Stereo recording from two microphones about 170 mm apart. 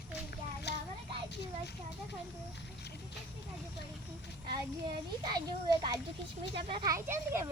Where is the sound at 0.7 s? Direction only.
90° left.